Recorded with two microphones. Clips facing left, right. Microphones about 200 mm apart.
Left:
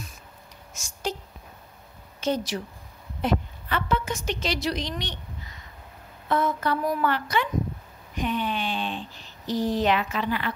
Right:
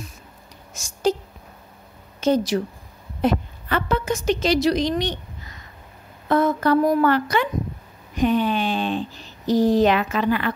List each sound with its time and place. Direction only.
2.1 s a woman's voice: 40° right (ahead or behind)
6.2 s a woman's voice: 40° right (ahead or behind)
8.2 s a sound: 40° right (ahead or behind)
9.5 s a woman's voice: 40° right (ahead or behind)